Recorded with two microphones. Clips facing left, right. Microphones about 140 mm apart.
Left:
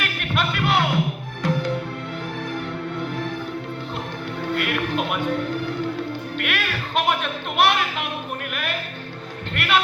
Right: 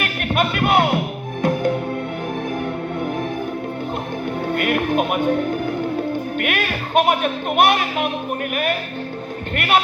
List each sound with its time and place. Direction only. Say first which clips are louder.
0.0 s music: right 5 dB; 50° right (ahead or behind)
3.0 s music: right 5 dB; 50° right (ahead or behind)
4.4 s music: right 4 dB; 50° right (ahead or behind)
6.3 s speech: right 4 dB; 50° right (ahead or behind)
9.6 s speech: right 3 dB; 50° right (ahead or behind)